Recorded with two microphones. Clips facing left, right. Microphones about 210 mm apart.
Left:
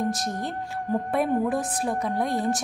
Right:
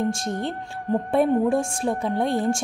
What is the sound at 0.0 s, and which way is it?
A woman's voice, 30° right (ahead or behind).